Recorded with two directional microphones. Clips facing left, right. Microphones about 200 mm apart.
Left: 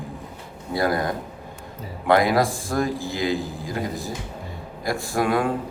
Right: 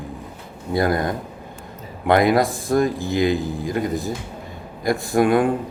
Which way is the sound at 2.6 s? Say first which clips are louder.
Right 5 dB; 20° right (ahead or behind).